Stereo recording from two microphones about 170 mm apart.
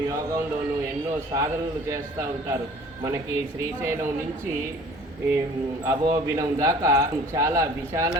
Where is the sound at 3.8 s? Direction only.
15° right (ahead or behind).